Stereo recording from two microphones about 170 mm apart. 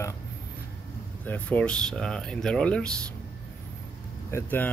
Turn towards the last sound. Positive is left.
turn(degrees=15)  # may be behind; listen again after turning